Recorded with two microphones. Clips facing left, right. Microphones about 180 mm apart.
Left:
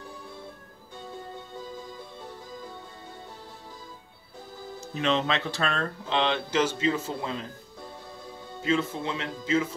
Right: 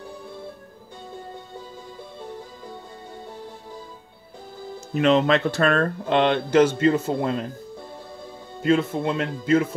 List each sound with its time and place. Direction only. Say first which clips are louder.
4.9 s speech: right 8 dB; 55° right (ahead or behind)
8.6 s speech: right 6 dB; 60° right (ahead or behind)